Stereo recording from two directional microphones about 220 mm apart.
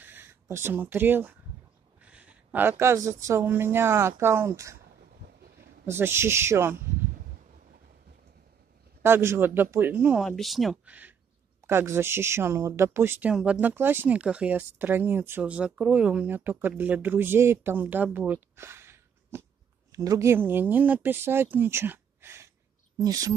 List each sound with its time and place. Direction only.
0.0 s speech: 10° right (ahead or behind)
2.0 s a sound: 5° right (ahead or behind)
2.7 s speech: 15° right (ahead or behind)
5.9 s speech: 10° right (ahead or behind)
9.0 s speech: 10° right (ahead or behind)